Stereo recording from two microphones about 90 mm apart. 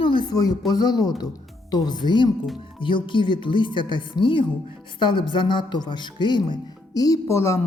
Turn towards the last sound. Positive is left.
turn(degrees=30)  # may be behind; listen again after turning